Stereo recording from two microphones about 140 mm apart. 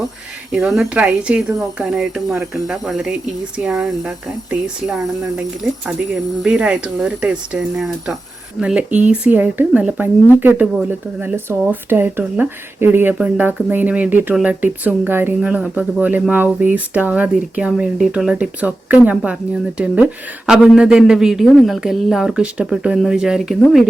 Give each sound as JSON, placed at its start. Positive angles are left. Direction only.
{"t": 0.5, "sound": "speech", "side_deg": -5}
{"t": 6.4, "sound": "speech", "side_deg": -5}
{"t": 20.5, "sound": "speech", "side_deg": -5}